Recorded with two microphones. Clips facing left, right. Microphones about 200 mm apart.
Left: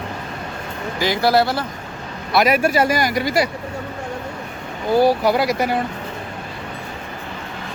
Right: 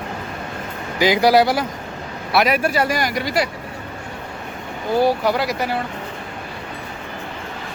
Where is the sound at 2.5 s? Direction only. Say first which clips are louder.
Left 2 dB; 40° left (ahead or behind).